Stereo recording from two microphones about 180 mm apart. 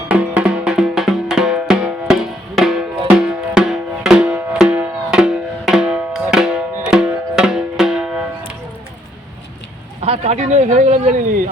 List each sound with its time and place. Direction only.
0.1 s music: 5° right (ahead or behind)
3.2 s music: 5° right (ahead or behind)
10.0 s a sound: 35° right (ahead or behind)